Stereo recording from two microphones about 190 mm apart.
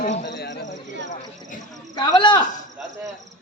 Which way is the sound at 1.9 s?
25° left (ahead or behind).